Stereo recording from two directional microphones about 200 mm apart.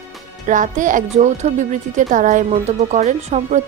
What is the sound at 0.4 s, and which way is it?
Speech, 40° right (ahead or behind).